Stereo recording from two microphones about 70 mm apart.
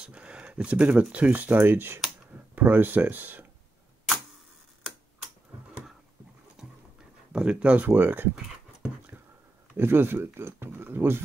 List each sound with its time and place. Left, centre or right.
0.0 s speech: centre
6.6 s a sound: centre
7.3 s speech: centre
9.8 s speech: right